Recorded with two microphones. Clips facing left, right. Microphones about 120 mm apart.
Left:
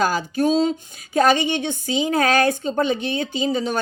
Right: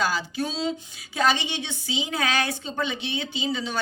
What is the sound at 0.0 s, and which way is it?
A woman's voice, 50° left (ahead or behind).